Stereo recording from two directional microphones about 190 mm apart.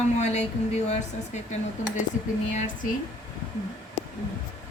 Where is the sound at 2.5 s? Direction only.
40° left (ahead or behind).